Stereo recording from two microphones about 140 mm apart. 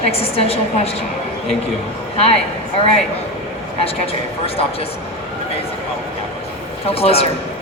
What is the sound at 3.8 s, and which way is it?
Speech, 45° left (ahead or behind).